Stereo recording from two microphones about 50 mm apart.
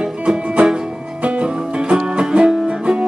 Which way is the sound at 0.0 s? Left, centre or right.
Centre.